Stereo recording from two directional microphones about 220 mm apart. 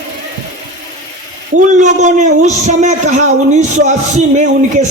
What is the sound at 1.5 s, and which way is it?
A man's voice, 35° right (ahead or behind).